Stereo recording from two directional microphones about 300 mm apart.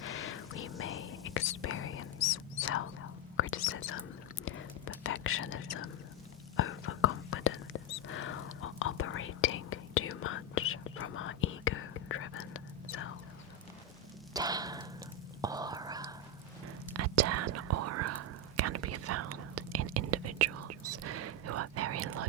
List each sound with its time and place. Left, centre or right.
0.0 s whispering: left
3.3 s whispering: left
14.3 s a sound: centre
15.4 s whispering: centre
16.9 s whispering: right